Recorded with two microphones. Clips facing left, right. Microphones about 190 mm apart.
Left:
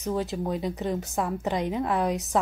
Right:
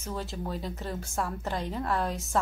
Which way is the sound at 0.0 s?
15° left (ahead or behind).